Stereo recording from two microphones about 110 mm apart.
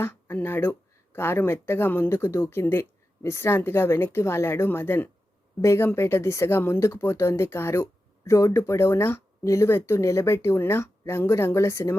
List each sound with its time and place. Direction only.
0.0 s speech: 20° left (ahead or behind)